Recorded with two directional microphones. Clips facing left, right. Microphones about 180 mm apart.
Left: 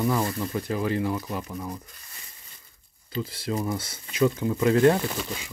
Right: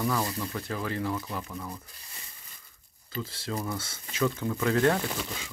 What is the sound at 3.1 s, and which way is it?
Speech, 15° left (ahead or behind).